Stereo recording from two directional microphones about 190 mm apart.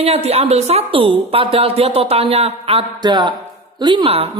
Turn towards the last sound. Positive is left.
turn(degrees=-30)  # may be behind; listen again after turning